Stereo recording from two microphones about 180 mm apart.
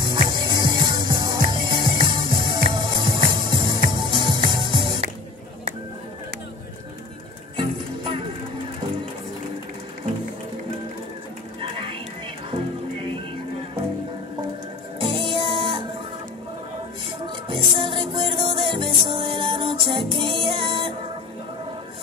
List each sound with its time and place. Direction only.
0.0 s music: 25° right (ahead or behind)
7.5 s music: 25° right (ahead or behind)
15.0 s music: 30° right (ahead or behind)
17.5 s music: 30° right (ahead or behind)